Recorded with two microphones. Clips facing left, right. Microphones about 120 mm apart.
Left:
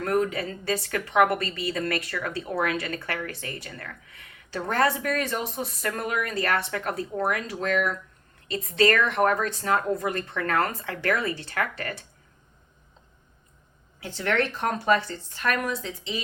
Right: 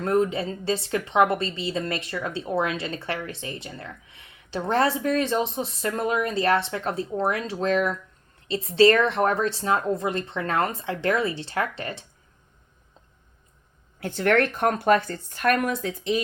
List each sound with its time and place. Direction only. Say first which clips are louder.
0.0 s a woman's voice: right 2 dB; 25° right (ahead or behind)
14.0 s speech: right 5 dB; 50° right (ahead or behind)